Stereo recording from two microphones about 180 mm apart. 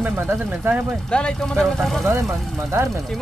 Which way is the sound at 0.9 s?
5° left (ahead or behind).